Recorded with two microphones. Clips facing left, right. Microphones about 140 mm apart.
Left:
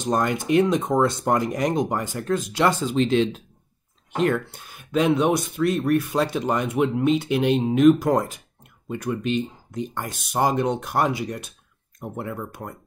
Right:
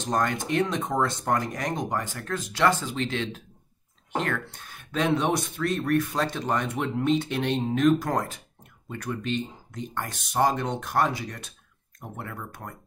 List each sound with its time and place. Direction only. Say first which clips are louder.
0.0 s speech: left 4 dB; 15° left (ahead or behind)